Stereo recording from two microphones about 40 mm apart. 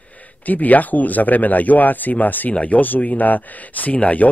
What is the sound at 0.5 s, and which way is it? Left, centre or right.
Speech, left.